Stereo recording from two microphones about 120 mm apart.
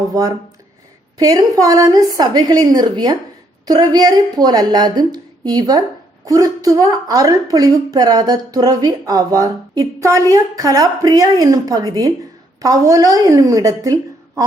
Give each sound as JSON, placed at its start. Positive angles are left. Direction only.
{"t": 0.1, "sound": "a woman's voice", "side_deg": -35}